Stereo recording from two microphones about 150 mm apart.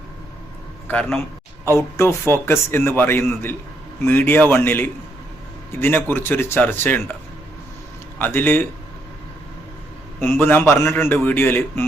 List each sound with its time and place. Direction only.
0.9 s a man's voice: 5° left (ahead or behind)
8.2 s a man's voice: 10° left (ahead or behind)
10.2 s a man's voice: 15° left (ahead or behind)